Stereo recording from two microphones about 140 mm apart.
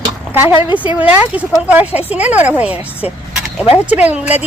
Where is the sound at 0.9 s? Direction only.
10° right (ahead or behind).